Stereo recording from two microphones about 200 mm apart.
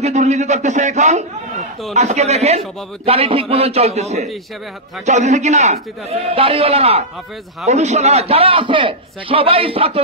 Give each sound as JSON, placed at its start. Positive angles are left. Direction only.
{"t": 0.0, "sound": "a man's voice", "side_deg": -35}